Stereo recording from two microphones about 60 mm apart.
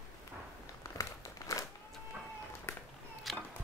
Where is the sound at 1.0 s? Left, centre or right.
Left.